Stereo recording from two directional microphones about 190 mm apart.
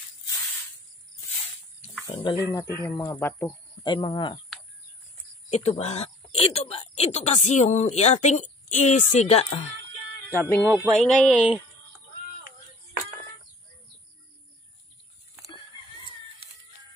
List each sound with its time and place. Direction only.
2.1 s speech: 25° left (ahead or behind)
3.8 s speech: 25° left (ahead or behind)
5.5 s speech: 35° left (ahead or behind)
10.3 s speech: 10° left (ahead or behind)
11.0 s speech: centre (ahead or behind)